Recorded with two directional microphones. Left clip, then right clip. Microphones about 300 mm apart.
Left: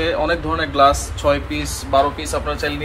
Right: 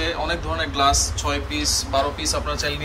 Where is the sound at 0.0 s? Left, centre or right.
Centre.